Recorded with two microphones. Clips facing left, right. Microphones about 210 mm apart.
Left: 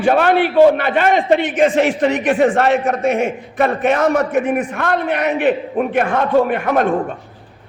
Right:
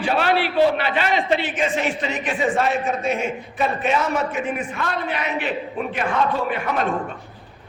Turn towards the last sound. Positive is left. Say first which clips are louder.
# left 8 dB
turn(degrees=55)  # may be behind; listen again after turning